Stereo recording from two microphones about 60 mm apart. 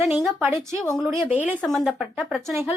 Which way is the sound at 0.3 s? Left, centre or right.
Right.